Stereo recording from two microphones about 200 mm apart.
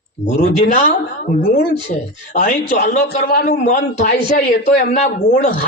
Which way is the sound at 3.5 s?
35° left (ahead or behind).